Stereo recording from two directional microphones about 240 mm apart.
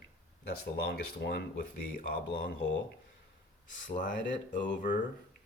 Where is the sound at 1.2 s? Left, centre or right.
Left.